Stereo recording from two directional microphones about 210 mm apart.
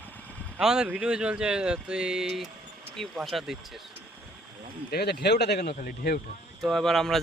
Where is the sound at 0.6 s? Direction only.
5° right (ahead or behind).